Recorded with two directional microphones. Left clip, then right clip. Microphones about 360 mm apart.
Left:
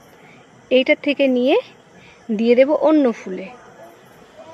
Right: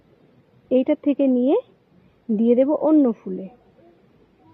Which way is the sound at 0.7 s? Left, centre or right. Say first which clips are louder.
Left 4 dB; centre.